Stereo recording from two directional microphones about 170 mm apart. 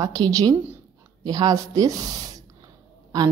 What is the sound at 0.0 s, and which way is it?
A woman's voice, 20° right (ahead or behind).